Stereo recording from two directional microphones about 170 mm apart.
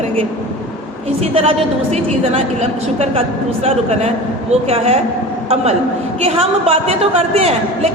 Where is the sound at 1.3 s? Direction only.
35° right (ahead or behind).